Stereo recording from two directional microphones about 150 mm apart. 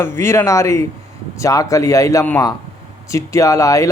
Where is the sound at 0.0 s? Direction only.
15° left (ahead or behind).